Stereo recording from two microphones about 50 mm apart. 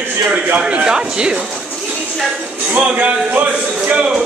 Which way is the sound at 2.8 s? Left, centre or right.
Right.